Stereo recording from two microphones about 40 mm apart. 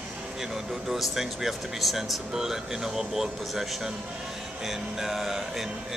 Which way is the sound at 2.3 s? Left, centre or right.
Centre.